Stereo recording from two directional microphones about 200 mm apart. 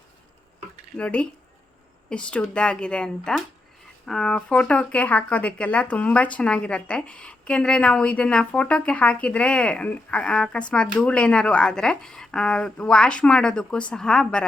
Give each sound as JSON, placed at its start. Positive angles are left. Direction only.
{"t": 0.9, "sound": "speech", "side_deg": 5}